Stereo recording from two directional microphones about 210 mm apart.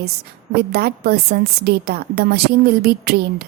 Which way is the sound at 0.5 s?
50° right (ahead or behind).